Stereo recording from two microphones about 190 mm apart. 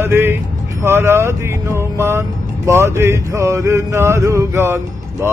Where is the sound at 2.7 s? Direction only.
15° right (ahead or behind).